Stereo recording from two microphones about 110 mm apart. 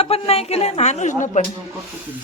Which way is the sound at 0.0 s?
65° left (ahead or behind).